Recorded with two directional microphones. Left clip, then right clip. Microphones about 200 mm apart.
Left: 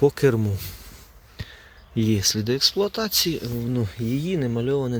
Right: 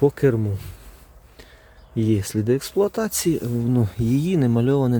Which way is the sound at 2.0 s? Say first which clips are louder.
Right 2 dB; 10° right (ahead or behind).